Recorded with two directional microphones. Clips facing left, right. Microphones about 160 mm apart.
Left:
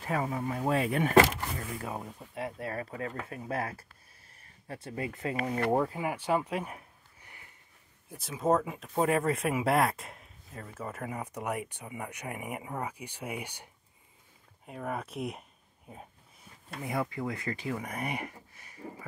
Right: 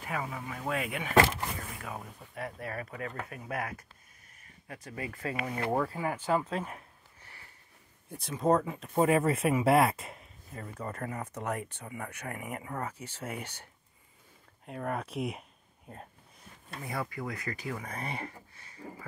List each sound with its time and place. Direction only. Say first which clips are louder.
0.0 s speech: left 5 dB; 35° left (ahead or behind)
1.8 s speech: left 4 dB; 25° left (ahead or behind)
8.1 s speech: right 1 dB; centre (ahead or behind)
14.7 s speech: right 1 dB; centre (ahead or behind)
16.8 s speech: left 4 dB; 20° left (ahead or behind)